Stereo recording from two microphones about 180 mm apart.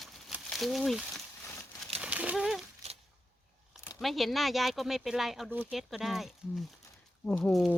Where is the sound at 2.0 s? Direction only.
10° right (ahead or behind).